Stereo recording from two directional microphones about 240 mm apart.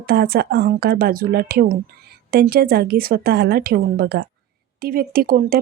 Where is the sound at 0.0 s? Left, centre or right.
Right.